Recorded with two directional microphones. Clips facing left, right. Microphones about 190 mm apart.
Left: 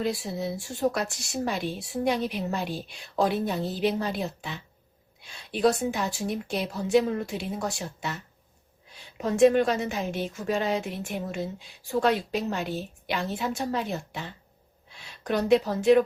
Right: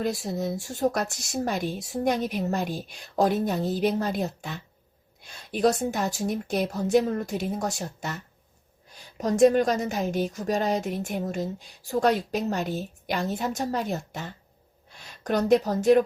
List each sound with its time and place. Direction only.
0.0 s a woman's voice: 45° right (ahead or behind)